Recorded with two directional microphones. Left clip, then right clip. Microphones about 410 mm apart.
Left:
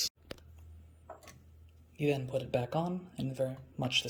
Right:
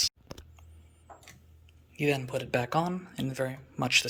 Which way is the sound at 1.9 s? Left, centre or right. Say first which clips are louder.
Right 3 dB; centre.